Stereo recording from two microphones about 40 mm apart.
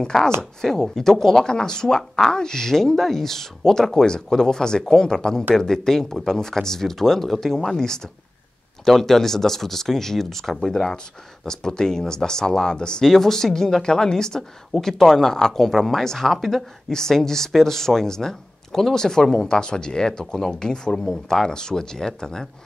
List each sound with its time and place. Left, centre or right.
0.0 s speech: centre
13.0 s speech: centre